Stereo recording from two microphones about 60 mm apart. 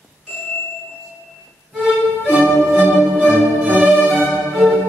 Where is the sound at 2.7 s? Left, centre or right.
Right.